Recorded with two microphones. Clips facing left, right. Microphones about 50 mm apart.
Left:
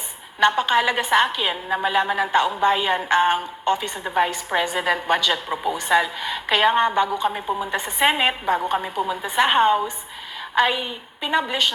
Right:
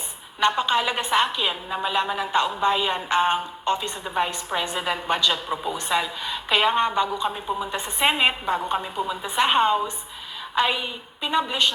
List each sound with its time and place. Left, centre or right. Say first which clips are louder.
0.4 s a woman's voice: left 3 dB; left
11.2 s a woman's voice: left 2 dB; left